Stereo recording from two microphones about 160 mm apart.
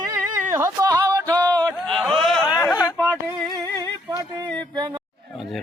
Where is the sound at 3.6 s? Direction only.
20° right (ahead or behind).